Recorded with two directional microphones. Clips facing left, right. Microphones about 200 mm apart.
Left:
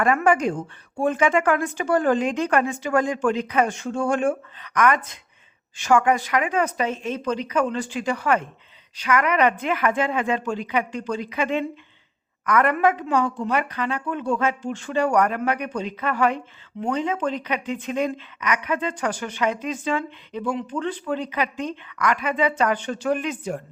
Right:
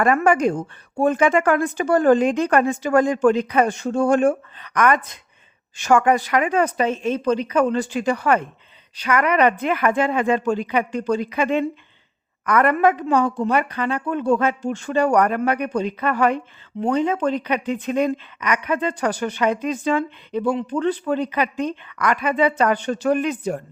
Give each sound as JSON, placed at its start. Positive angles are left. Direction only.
{"t": 0.0, "sound": "a woman's voice", "side_deg": -45}
{"t": 21.2, "sound": "a woman's voice", "side_deg": -50}